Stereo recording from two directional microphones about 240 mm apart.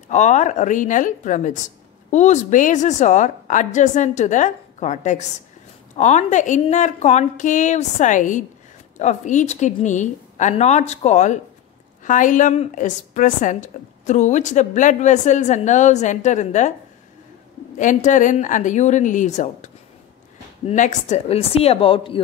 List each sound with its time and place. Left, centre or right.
0.1 s a woman's voice: left
17.7 s a woman's voice: left